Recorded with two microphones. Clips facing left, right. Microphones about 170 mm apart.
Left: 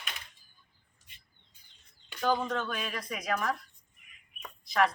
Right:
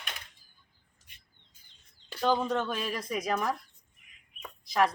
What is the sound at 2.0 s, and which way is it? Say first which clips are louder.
Bird: right 2 dB; 35° right (ahead or behind).